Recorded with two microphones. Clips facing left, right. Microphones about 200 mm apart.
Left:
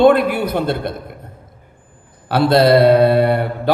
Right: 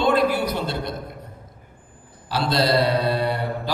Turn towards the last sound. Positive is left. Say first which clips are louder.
# left 8 dB
turn(degrees=60)  # may be behind; listen again after turning